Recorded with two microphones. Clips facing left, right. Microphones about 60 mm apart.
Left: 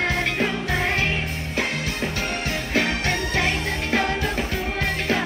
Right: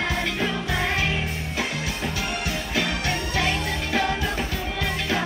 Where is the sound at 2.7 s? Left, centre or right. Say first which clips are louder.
Left 4 dB; left.